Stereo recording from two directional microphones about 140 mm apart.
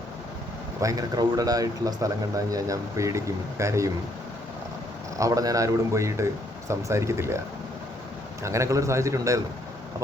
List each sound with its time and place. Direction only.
0.8 s speech: 25° right (ahead or behind)
5.1 s speech: 25° right (ahead or behind)
8.4 s speech: 20° right (ahead or behind)